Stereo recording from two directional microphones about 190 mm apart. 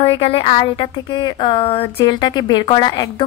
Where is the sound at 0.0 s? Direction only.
25° left (ahead or behind).